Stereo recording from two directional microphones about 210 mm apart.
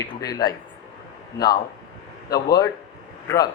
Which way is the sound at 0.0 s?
15° left (ahead or behind).